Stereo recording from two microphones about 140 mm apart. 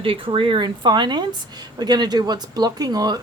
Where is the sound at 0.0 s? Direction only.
40° right (ahead or behind).